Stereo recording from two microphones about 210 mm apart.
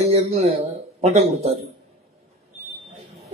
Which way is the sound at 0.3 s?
30° right (ahead or behind).